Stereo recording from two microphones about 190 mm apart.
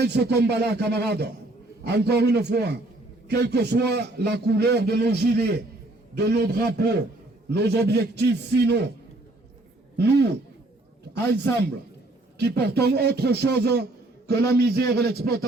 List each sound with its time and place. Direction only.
0.0 s a man's voice: 60° right (ahead or behind)
10.0 s a man's voice: 60° right (ahead or behind)